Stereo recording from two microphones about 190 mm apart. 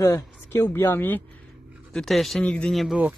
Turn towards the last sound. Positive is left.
turn(degrees=-5)  # may be behind; listen again after turning